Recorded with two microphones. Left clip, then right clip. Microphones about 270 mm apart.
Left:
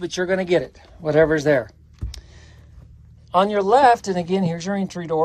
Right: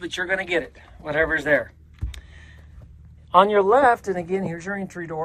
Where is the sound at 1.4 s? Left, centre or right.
Centre.